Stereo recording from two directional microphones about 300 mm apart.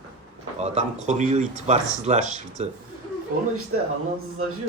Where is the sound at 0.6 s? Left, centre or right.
Right.